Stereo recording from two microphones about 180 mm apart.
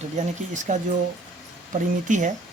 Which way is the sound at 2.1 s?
45° right (ahead or behind).